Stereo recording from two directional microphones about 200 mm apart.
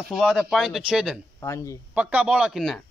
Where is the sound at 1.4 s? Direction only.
15° left (ahead or behind).